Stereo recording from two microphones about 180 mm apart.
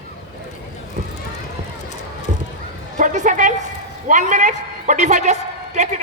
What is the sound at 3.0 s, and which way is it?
A man's voice, 45° right (ahead or behind).